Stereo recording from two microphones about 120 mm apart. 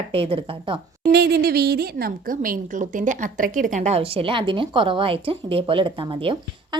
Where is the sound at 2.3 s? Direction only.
90° right; by 6.8 s 45° right (ahead or behind).